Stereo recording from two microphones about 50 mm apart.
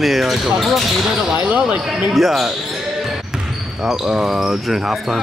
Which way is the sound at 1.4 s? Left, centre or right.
Right.